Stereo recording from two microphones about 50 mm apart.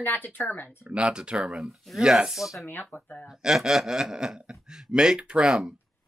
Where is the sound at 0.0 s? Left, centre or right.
Left.